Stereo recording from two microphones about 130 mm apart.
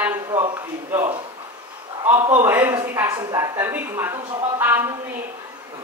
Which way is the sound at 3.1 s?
30° right (ahead or behind).